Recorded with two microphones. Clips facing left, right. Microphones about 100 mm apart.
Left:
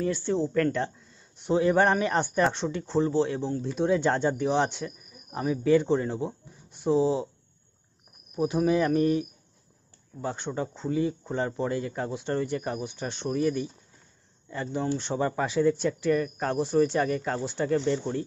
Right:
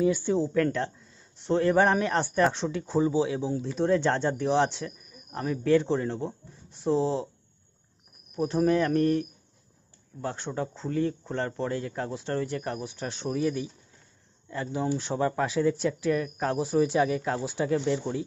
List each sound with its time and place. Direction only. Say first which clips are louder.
0.0 s speech: right 2 dB; 5° right (ahead or behind)
8.4 s speech: even; 5° left (ahead or behind)